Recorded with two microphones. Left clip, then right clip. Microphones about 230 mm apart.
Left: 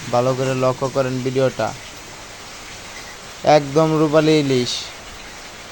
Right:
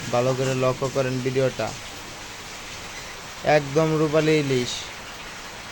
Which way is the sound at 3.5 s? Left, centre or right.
Centre.